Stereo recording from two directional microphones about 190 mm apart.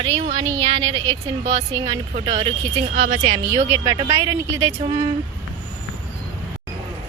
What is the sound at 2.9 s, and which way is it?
Speech, 55° right (ahead or behind).